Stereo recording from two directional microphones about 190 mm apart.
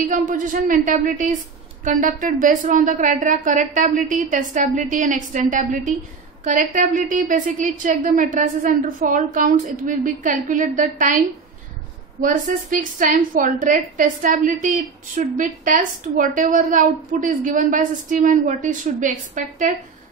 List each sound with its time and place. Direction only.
0.1 s a woman's voice: 45° right (ahead or behind)
12.2 s a woman's voice: 45° right (ahead or behind)